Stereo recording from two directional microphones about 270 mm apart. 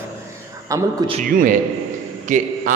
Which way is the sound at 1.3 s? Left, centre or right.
Right.